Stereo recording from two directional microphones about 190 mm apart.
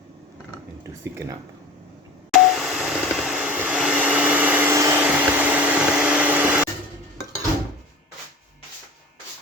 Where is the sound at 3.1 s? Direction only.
Centre (ahead or behind).